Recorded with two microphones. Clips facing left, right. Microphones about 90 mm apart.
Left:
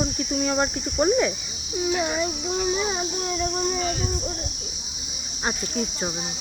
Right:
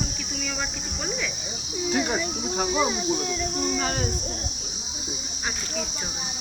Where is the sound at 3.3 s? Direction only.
40° left (ahead or behind).